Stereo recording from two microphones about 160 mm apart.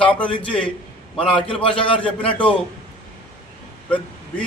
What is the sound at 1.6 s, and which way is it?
Speech, 35° left (ahead or behind).